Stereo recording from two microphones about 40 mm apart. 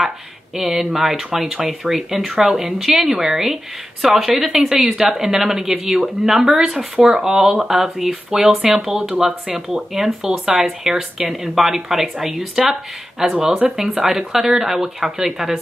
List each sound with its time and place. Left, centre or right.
0.6 s a woman's voice: centre